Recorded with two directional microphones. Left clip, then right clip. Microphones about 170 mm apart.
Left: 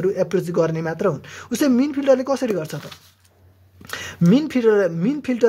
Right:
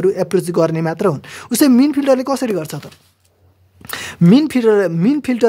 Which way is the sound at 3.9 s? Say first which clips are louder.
Right 5 dB; 45° right (ahead or behind).